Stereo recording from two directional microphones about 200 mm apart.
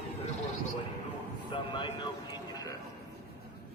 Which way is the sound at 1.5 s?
25° left (ahead or behind).